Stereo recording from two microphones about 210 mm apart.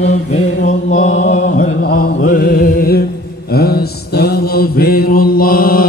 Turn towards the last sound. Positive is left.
turn(degrees=45)  # may be behind; listen again after turning